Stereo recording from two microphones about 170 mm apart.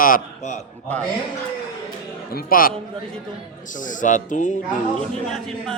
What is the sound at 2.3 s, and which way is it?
Speech, 55° left (ahead or behind).